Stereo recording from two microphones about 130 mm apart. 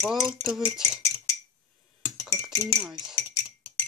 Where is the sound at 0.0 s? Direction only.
Centre (ahead or behind).